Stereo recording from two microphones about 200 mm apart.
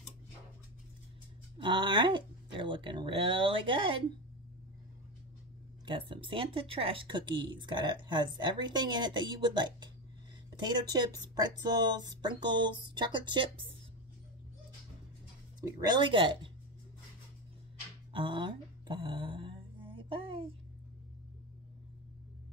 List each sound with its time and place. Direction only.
1.6 s speech: 25° right (ahead or behind)
5.9 s speech: 25° right (ahead or behind)
15.6 s speech: 20° right (ahead or behind)
18.1 s a sound: 25° right (ahead or behind)